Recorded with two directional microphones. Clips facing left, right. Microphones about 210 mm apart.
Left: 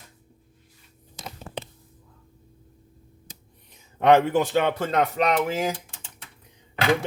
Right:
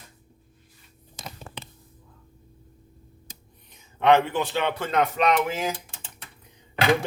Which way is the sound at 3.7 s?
40° left (ahead or behind).